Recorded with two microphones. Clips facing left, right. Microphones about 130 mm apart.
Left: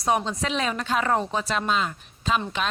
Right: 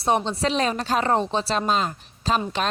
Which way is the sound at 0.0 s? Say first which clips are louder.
Right 2 dB; 30° right (ahead or behind).